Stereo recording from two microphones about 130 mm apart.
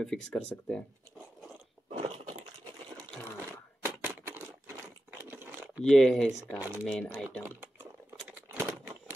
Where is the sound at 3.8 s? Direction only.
15° right (ahead or behind).